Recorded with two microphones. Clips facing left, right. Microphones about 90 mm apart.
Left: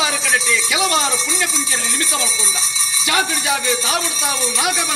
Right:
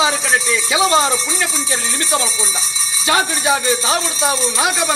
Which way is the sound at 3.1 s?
35° right (ahead or behind).